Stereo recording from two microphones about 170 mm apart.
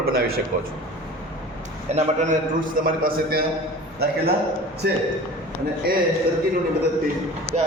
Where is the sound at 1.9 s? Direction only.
45° right (ahead or behind); by 3.4 s 60° right (ahead or behind).